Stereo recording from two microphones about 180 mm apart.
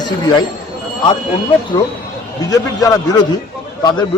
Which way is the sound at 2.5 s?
20° left (ahead or behind).